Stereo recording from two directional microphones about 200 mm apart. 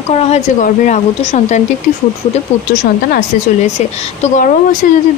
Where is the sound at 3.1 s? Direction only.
35° left (ahead or behind).